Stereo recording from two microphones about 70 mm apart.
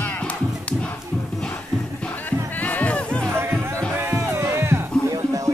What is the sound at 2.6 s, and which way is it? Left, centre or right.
Music, left.